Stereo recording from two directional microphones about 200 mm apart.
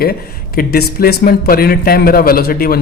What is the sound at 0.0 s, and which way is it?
A man's voice, 50° left (ahead or behind).